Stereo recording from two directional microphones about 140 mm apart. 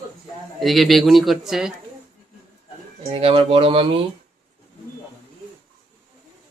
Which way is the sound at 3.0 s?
40° right (ahead or behind).